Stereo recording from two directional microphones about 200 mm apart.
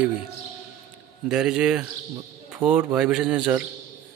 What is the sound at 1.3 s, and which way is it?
Speech, 5° right (ahead or behind).